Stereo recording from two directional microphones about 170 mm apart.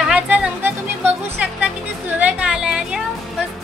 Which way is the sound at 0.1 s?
10° right (ahead or behind).